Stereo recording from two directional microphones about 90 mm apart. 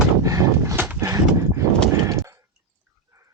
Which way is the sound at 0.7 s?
20° right (ahead or behind).